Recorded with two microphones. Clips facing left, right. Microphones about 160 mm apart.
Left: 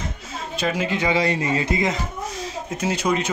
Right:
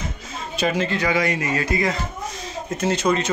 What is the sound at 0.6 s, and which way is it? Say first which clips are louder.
Speech: right 2 dB; centre (ahead or behind).